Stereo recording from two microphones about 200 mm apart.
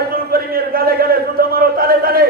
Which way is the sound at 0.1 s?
50° right (ahead or behind).